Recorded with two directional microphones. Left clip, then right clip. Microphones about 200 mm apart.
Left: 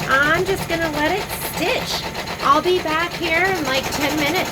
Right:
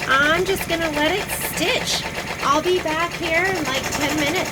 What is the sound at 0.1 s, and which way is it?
A woman's voice, 15° right (ahead or behind).